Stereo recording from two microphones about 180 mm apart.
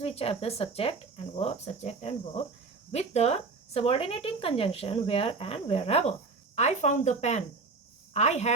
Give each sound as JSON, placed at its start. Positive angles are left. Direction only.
{"t": 0.0, "sound": "speech", "side_deg": 35}